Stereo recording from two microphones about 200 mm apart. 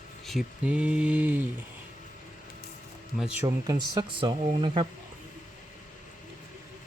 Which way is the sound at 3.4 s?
15° right (ahead or behind).